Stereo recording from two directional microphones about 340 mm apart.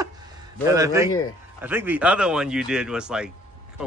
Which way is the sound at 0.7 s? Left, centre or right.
Centre.